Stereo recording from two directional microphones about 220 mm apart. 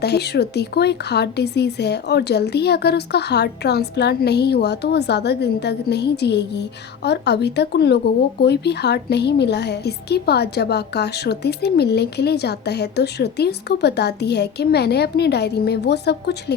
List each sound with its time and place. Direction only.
0.0 s speech: 50° left (ahead or behind)